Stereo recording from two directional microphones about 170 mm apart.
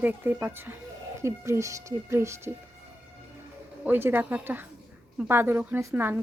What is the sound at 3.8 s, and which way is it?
Speech, 10° right (ahead or behind).